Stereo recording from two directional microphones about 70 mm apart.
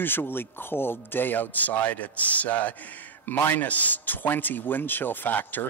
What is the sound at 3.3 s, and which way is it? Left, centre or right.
Speech, left.